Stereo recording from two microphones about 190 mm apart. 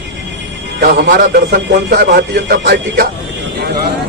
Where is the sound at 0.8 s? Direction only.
55° right (ahead or behind).